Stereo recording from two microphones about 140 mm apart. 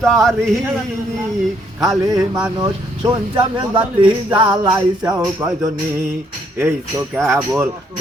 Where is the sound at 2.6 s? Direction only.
30° right (ahead or behind).